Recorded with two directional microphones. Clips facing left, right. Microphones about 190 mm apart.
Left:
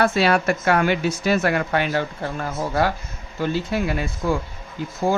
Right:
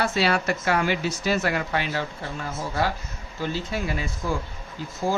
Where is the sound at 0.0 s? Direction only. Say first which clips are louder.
Left 5 dB; 55° left (ahead or behind).